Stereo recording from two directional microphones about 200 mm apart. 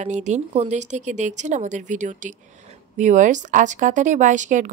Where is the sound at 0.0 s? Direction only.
35° right (ahead or behind).